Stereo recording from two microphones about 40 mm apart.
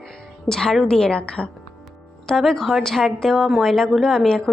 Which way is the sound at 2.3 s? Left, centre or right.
Centre.